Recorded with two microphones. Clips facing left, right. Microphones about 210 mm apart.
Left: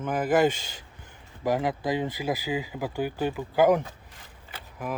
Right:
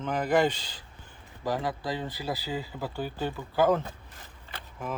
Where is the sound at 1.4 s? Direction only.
20° left (ahead or behind).